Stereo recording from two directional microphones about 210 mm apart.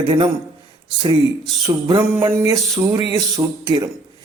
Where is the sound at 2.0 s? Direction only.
10° right (ahead or behind).